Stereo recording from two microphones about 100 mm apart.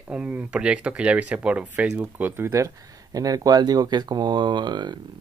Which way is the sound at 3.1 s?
40° right (ahead or behind).